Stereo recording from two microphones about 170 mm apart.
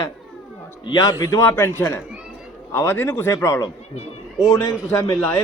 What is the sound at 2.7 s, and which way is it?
A man's voice, 15° left (ahead or behind).